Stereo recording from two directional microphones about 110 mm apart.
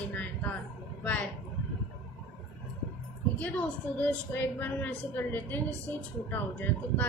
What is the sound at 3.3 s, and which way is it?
A woman's voice, 15° left (ahead or behind).